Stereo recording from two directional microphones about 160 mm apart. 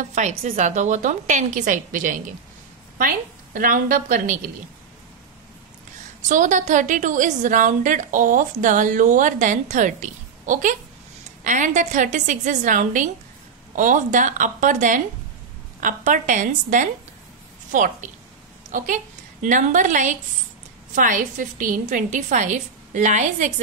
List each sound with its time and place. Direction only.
0.1 s a woman's voice: 50° right (ahead or behind)
6.2 s a woman's voice: 50° right (ahead or behind)